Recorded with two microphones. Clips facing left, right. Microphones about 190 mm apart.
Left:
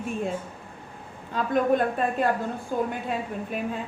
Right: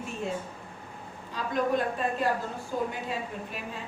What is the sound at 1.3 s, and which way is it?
Speech, 55° left (ahead or behind).